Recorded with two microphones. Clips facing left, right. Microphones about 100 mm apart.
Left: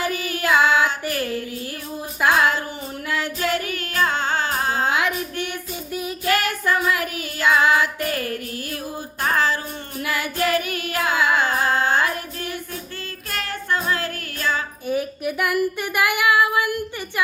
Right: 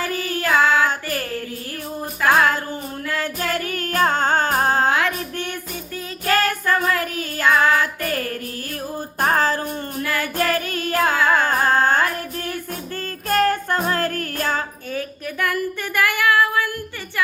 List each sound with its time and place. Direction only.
0.0 s child singing: 15° left (ahead or behind)
0.4 s child singing: 40° right (ahead or behind)
2.3 s music: 45° right (ahead or behind)
3.1 s child singing: 45° right (ahead or behind)
3.7 s music: 45° right (ahead or behind)
4.9 s child singing: 15° left (ahead or behind)
7.8 s music: 45° right (ahead or behind)
9.2 s a sound: 45° right (ahead or behind)
10.0 s music: 15° left (ahead or behind)
10.3 s child singing: 45° right (ahead or behind)
11.3 s music: 45° right (ahead or behind)
13.2 s music: 45° right (ahead or behind)
14.8 s child singing: 15° left (ahead or behind)